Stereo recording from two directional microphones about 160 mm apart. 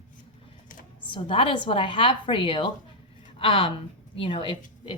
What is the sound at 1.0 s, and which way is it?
A woman's voice, 30° left (ahead or behind).